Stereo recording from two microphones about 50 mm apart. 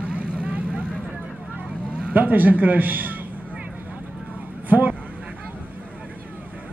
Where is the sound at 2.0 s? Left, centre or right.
Right.